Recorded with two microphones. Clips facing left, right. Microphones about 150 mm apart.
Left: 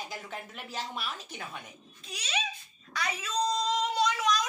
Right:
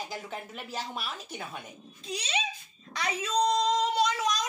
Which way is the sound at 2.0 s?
30° right (ahead or behind).